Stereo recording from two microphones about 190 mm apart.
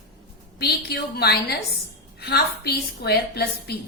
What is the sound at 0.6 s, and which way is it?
A woman's voice, 55° left (ahead or behind).